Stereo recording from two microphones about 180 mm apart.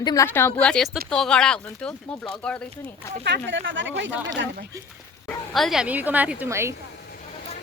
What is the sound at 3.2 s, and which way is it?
Speech, 80° right.